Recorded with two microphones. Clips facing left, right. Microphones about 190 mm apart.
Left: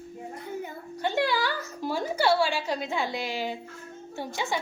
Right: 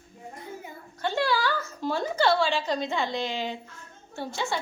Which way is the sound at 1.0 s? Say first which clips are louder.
Even; 15° left (ahead or behind).